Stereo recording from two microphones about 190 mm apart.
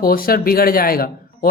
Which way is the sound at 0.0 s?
50° left (ahead or behind).